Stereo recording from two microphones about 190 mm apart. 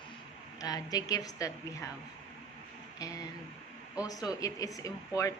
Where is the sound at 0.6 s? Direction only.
20° left (ahead or behind).